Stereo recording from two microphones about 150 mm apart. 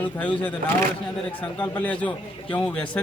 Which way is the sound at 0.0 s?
10° left (ahead or behind).